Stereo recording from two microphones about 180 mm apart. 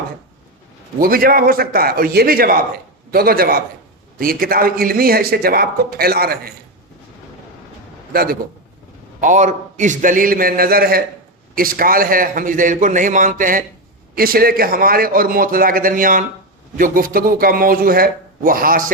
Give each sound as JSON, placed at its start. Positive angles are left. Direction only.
{"t": 0.9, "sound": "a man's voice", "side_deg": -55}
{"t": 8.1, "sound": "a man's voice", "side_deg": -55}
{"t": 9.2, "sound": "a man's voice", "side_deg": -40}